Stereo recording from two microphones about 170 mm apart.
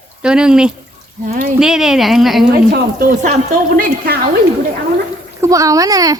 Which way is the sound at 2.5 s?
60° right (ahead or behind).